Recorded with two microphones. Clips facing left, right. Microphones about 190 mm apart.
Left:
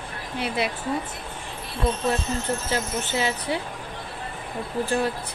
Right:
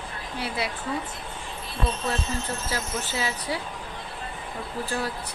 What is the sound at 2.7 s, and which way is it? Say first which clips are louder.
Speech: left 4 dB; 20° left (ahead or behind).